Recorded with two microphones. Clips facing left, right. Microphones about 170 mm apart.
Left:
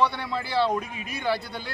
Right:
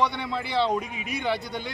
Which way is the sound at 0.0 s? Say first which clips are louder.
Left 1 dB; 20° right (ahead or behind).